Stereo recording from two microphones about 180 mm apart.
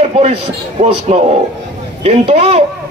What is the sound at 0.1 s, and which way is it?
A man's voice, 35° right (ahead or behind).